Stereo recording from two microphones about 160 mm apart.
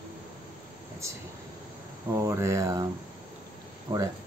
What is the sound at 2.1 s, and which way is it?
Speech, 15° right (ahead or behind).